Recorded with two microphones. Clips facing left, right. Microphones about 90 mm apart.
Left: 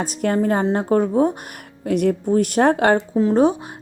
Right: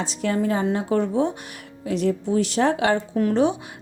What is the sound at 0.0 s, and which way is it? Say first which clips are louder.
Speech: left 4 dB; 50° left (ahead or behind).